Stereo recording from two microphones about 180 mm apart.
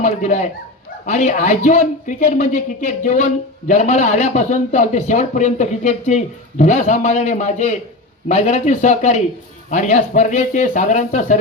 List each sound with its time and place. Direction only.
0.0 s a man's voice: 40° left (ahead or behind)